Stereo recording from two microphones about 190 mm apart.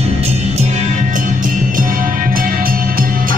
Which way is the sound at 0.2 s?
35° right (ahead or behind).